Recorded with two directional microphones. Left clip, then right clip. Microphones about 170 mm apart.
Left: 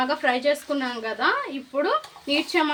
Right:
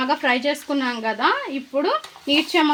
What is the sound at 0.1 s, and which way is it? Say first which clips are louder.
Speech: right 2 dB; 50° right (ahead or behind).